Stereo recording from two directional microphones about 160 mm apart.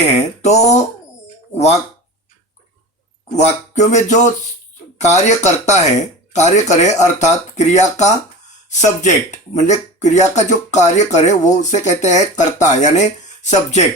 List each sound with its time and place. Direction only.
0.0 s speech: 45° left (ahead or behind)
3.8 s speech: 45° left (ahead or behind)